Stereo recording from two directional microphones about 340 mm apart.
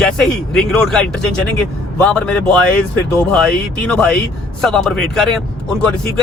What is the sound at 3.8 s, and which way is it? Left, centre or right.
Speech, centre.